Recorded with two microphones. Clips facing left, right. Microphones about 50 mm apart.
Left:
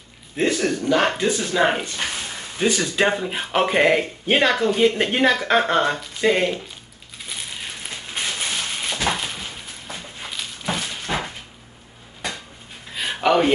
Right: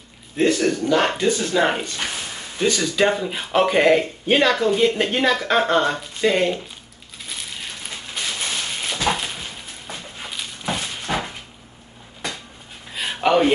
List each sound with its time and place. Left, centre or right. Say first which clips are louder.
0.4 s speech: right 2 dB; centre
2.6 s speech: right 1 dB; centre
7.6 s music: even; centre
8.4 s a sound: even; centre
10.7 s dog: right 1 dB; centre
12.9 s a sound: even; centre